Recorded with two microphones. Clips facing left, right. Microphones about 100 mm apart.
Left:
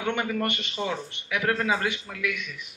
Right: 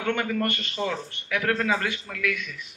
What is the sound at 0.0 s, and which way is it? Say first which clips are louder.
Speech: right 1 dB; 15° left (ahead or behind).